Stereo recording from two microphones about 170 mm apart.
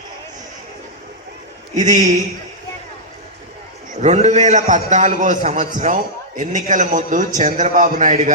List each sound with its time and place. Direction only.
1.7 s a man's voice: 45° right (ahead or behind)
4.0 s a man's voice: 40° right (ahead or behind)